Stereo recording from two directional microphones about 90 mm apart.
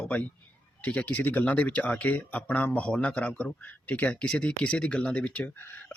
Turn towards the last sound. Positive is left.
turn(degrees=25)  # may be behind; listen again after turning